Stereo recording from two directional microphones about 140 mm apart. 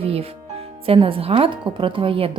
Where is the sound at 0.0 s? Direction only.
45° right (ahead or behind).